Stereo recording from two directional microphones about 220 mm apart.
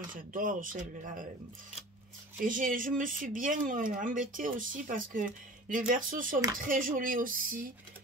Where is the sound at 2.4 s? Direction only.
40° right (ahead or behind).